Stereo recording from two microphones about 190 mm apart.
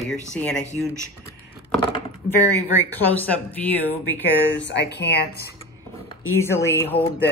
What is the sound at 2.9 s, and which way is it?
A woman's voice, 10° left (ahead or behind).